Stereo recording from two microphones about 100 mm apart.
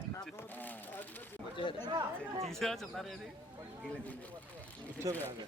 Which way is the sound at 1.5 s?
55° left (ahead or behind).